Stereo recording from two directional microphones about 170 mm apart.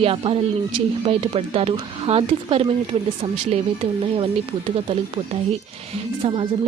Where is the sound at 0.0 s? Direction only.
35° right (ahead or behind).